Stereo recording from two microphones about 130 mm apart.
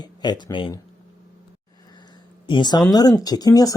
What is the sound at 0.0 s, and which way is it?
Speech, 35° left (ahead or behind).